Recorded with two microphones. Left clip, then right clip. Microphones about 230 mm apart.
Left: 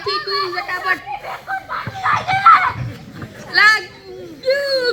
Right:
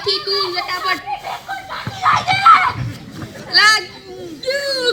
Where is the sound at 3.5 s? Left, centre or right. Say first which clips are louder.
Even; right.